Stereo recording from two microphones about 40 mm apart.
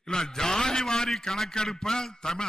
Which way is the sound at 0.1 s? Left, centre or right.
Centre.